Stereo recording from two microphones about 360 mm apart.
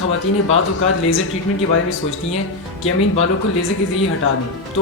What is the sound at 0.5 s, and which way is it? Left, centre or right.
Speech, left.